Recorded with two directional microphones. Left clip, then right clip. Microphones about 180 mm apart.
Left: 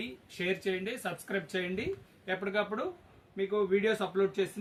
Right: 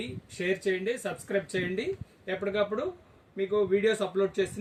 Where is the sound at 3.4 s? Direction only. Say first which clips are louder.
Right 3 dB; 15° left (ahead or behind).